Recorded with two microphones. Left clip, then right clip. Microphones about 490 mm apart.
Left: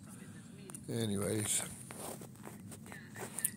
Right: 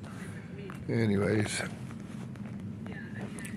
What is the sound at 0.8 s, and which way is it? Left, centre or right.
Speech, left.